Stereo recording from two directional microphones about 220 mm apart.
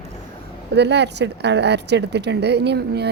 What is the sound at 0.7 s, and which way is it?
Speech, 50° right (ahead or behind).